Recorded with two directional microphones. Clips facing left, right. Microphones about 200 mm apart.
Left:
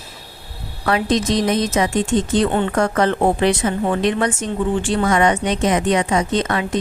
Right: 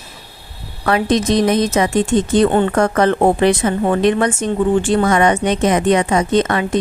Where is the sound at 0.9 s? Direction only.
55° right (ahead or behind).